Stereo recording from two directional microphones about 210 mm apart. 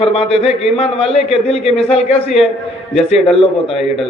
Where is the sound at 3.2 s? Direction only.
25° left (ahead or behind).